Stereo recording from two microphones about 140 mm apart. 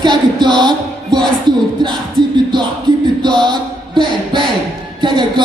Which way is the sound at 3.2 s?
30° right (ahead or behind).